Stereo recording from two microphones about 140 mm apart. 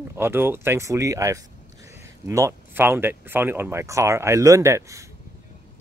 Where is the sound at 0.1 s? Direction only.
15° right (ahead or behind).